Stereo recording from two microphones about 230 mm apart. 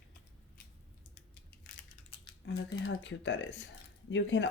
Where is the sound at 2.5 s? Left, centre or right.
Left.